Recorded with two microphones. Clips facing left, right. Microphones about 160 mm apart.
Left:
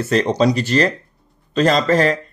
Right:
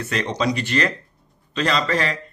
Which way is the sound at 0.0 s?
35° left (ahead or behind).